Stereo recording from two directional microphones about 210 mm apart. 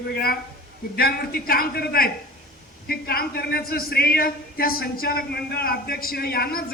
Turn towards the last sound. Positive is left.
turn(degrees=45)  # may be behind; listen again after turning